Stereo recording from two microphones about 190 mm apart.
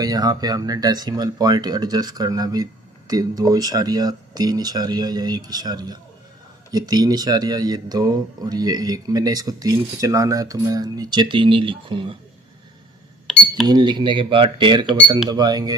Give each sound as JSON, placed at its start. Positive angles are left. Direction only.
{"t": 0.0, "sound": "speech", "side_deg": -20}
{"t": 13.3, "sound": "cash register", "side_deg": 0}
{"t": 13.7, "sound": "speech", "side_deg": -25}